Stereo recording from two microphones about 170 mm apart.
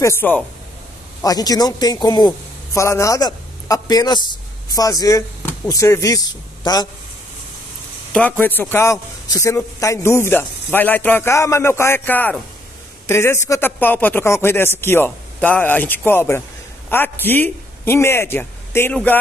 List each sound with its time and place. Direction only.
0.0 s a man's voice: 15° left (ahead or behind)
8.1 s a man's voice: 10° left (ahead or behind)